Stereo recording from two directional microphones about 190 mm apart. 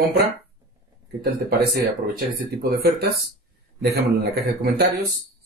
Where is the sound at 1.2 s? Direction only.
55° right (ahead or behind).